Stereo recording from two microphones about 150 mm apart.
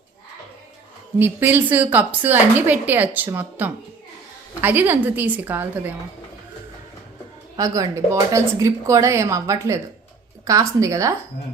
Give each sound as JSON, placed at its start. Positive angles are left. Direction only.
{"t": 1.2, "sound": "a woman's voice", "side_deg": -15}
{"t": 7.5, "sound": "speech", "side_deg": -20}